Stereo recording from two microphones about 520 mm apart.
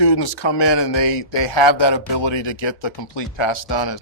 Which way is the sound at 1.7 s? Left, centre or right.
Left.